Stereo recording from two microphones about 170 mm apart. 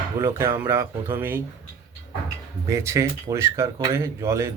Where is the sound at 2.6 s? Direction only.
15° right (ahead or behind).